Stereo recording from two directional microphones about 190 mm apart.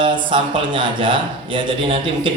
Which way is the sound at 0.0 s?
25° right (ahead or behind).